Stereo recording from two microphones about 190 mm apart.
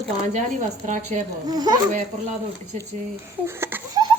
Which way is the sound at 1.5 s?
20° right (ahead or behind).